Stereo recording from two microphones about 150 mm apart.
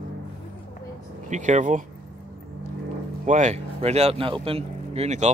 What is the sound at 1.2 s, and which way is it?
Speech, 55° right (ahead or behind).